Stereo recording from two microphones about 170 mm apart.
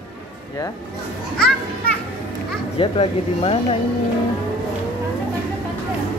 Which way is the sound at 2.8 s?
35° left (ahead or behind).